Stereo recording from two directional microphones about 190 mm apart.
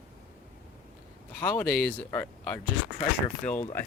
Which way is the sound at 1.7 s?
55° left (ahead or behind).